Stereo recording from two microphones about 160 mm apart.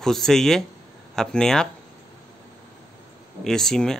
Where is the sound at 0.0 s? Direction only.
5° left (ahead or behind).